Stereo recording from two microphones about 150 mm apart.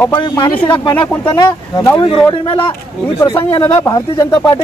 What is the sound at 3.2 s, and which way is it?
Speech, 30° left (ahead or behind).